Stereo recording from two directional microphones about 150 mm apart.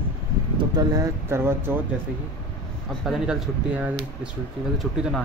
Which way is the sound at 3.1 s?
5° right (ahead or behind).